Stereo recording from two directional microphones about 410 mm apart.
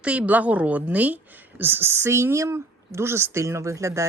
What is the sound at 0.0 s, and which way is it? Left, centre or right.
A woman's voice, centre.